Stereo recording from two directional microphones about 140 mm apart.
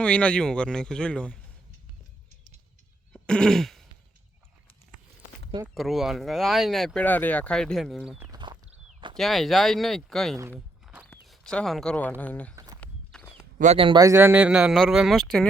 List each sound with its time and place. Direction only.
0.0 s speech: 10° left (ahead or behind)
3.1 s throat clearing: 5° left (ahead or behind)
5.7 s speech: centre (ahead or behind)
8.3 s a sound: 35° right (ahead or behind)
9.1 s speech: centre (ahead or behind)
10.9 s walk: 5° right (ahead or behind)
11.3 s speech: 5° left (ahead or behind)
12.5 s walk: 25° right (ahead or behind)
12.8 s walk: 5° left (ahead or behind)
13.7 s speech: 40° right (ahead or behind)
14.0 s speech: 20° right (ahead or behind); by 15.4 s centre (ahead or behind)